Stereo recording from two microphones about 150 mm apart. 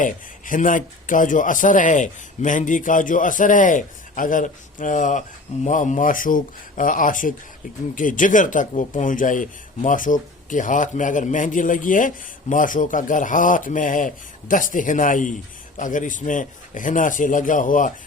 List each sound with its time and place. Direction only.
0.0 s speech: 60° left (ahead or behind)